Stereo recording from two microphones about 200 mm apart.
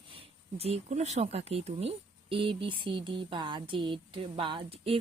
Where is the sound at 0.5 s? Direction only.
30° right (ahead or behind).